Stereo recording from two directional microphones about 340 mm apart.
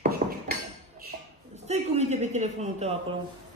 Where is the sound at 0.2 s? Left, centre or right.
Right.